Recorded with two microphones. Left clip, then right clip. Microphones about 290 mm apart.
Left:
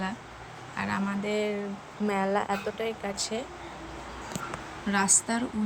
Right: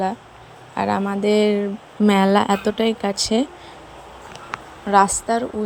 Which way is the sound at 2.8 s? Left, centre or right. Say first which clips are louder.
Right 11 dB; centre.